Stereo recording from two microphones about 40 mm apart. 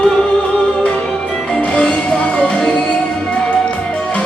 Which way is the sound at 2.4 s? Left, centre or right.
Left.